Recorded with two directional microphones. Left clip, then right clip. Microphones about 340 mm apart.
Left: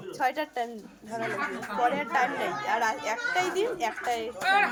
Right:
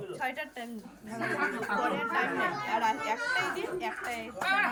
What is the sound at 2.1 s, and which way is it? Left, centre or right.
Speech, centre.